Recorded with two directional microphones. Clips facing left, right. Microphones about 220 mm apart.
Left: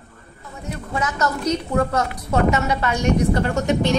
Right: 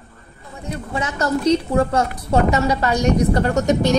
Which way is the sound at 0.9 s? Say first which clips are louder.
Right 2 dB; 30° right (ahead or behind).